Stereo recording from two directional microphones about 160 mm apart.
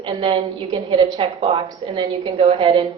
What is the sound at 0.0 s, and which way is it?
A woman's voice, 30° right (ahead or behind).